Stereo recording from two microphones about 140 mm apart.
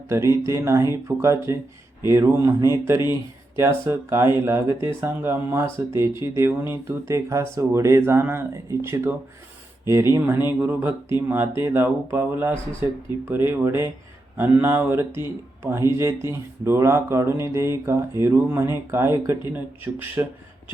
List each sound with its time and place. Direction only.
0.1 s speech: 20° right (ahead or behind)